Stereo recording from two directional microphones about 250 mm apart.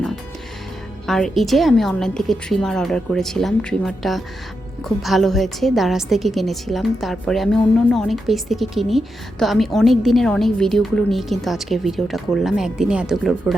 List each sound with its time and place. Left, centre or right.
1.0 s a woman's voice: centre